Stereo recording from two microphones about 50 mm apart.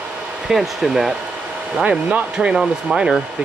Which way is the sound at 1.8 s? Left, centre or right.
Right.